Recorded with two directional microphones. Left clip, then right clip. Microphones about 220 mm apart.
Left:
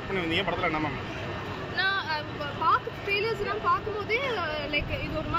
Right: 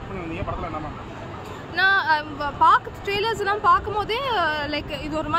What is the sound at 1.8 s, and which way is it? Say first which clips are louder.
Speech: right 9 dB; 50° right (ahead or behind).